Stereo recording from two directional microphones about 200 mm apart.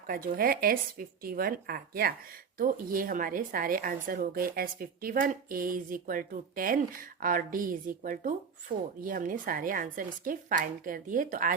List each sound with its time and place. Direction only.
0.1 s speech: 45° right (ahead or behind)
8.7 s speech: 25° right (ahead or behind)
9.0 s speech: 45° right (ahead or behind)